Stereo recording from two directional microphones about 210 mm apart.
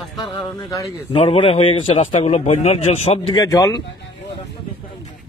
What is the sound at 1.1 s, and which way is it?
A man's voice, 30° left (ahead or behind).